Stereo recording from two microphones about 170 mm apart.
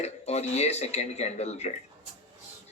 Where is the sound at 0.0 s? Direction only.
40° left (ahead or behind).